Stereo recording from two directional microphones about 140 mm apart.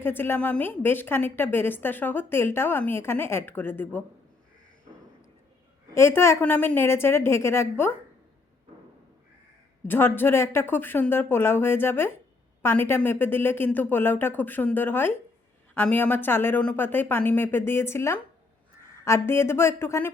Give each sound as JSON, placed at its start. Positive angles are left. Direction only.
{"t": 0.0, "sound": "a woman's voice", "side_deg": 15}
{"t": 5.9, "sound": "a woman's voice", "side_deg": 20}
{"t": 9.8, "sound": "a woman's voice", "side_deg": 15}